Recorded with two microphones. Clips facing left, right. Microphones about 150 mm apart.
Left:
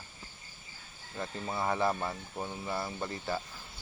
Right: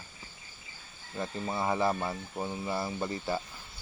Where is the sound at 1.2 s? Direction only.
5° right (ahead or behind).